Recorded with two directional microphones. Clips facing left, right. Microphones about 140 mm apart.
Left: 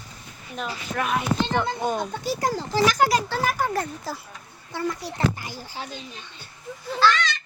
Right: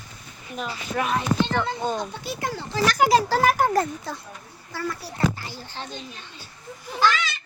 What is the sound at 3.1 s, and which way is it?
Speech, 35° right (ahead or behind).